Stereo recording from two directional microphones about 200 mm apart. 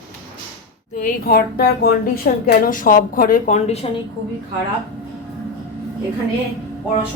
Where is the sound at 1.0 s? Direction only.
45° left (ahead or behind).